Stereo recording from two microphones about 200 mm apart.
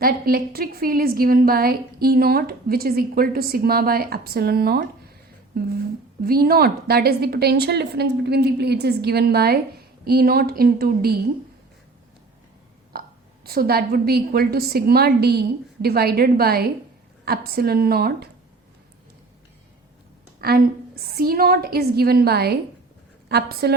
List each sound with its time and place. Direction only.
0.0 s a woman's voice: 50° right (ahead or behind)
12.9 s a woman's voice: 50° right (ahead or behind)
20.4 s a woman's voice: 50° right (ahead or behind)